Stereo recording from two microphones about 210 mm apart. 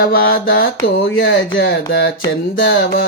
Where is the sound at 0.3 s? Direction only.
65° left (ahead or behind).